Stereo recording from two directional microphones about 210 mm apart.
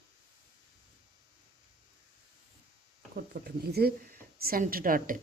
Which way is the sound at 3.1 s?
45° right (ahead or behind).